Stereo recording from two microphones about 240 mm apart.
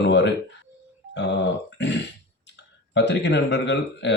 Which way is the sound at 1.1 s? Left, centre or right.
Left.